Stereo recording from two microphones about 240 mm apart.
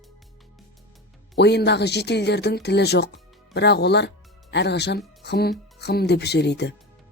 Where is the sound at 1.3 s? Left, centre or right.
Left.